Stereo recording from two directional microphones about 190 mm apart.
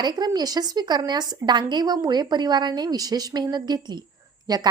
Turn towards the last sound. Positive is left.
turn(degrees=-20)  # may be behind; listen again after turning